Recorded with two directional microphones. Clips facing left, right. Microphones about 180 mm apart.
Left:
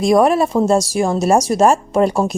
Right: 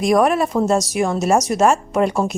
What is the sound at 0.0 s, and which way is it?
A woman's voice, 30° left (ahead or behind).